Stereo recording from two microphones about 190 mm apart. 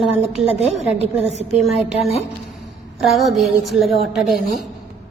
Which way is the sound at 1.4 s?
35° right (ahead or behind).